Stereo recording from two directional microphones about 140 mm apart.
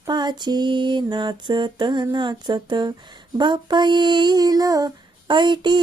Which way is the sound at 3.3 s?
30° right (ahead or behind).